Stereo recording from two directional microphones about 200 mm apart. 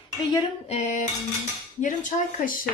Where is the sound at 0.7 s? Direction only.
35° left (ahead or behind).